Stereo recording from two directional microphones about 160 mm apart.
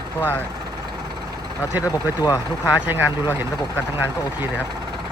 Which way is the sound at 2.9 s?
10° right (ahead or behind).